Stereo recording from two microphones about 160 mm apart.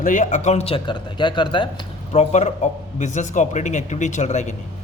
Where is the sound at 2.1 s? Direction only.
45° left (ahead or behind).